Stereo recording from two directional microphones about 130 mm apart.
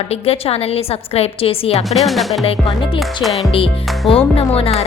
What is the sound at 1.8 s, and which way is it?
Music, centre (ahead or behind).